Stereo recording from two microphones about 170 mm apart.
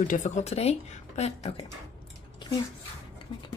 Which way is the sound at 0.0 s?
50° left (ahead or behind).